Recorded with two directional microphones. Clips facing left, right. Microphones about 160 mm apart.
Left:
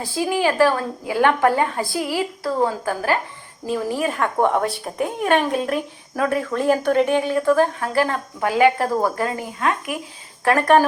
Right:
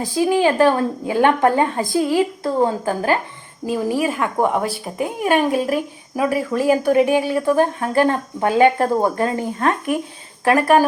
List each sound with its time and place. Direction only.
0.0 s a woman's voice: 15° right (ahead or behind)
3.7 s speech: 10° right (ahead or behind); by 10.0 s 35° right (ahead or behind)
10.4 s speech: 10° right (ahead or behind)